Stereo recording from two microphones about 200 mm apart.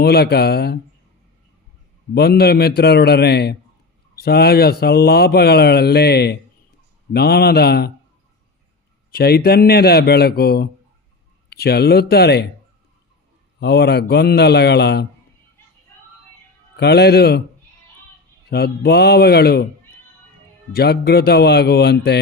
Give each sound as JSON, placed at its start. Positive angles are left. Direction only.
{"t": 0.0, "sound": "speech", "side_deg": 55}
{"t": 2.1, "sound": "speech", "side_deg": 55}
{"t": 9.1, "sound": "speech", "side_deg": 50}
{"t": 13.6, "sound": "a man's voice", "side_deg": 55}
{"t": 16.7, "sound": "speech", "side_deg": 55}
{"t": 18.5, "sound": "speech", "side_deg": 50}
{"t": 20.7, "sound": "a man's voice", "side_deg": 55}